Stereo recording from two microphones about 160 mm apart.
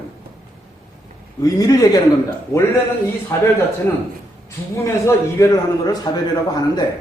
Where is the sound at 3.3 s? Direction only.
20° left (ahead or behind).